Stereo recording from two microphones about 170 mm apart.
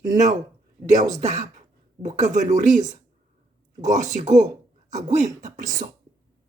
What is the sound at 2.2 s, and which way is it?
Speech, 45° right (ahead or behind).